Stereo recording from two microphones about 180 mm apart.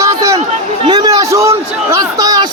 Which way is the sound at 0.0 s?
15° right (ahead or behind).